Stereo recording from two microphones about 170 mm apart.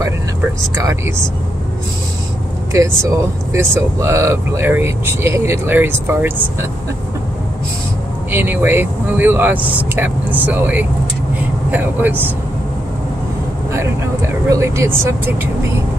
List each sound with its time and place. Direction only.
0.7 s speech: 15° right (ahead or behind)
2.7 s speech: 20° right (ahead or behind)
8.3 s speech: 10° right (ahead or behind)
13.7 s speech: 15° right (ahead or behind)